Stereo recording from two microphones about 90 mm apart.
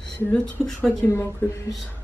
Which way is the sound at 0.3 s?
10° left (ahead or behind).